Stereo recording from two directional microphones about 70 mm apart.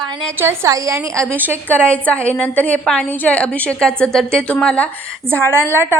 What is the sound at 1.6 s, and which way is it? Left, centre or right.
A woman's voice, centre.